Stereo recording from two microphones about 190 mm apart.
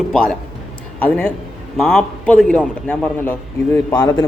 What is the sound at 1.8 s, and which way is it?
Speech, centre (ahead or behind).